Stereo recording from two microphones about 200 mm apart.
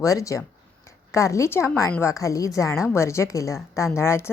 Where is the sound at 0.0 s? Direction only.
15° left (ahead or behind).